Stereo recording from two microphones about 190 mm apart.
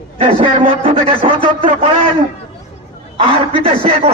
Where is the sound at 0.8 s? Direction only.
30° right (ahead or behind).